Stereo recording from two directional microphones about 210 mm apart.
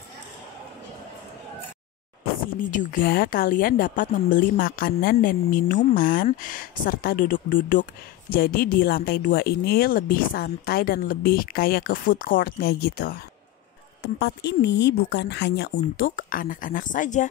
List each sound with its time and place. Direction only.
2.7 s a woman's voice: 40° left (ahead or behind)
14.2 s speech: 55° left (ahead or behind)
16.0 s a woman's voice: 40° left (ahead or behind)